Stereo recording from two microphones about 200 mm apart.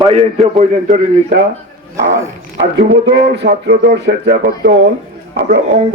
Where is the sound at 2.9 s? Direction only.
55° right (ahead or behind).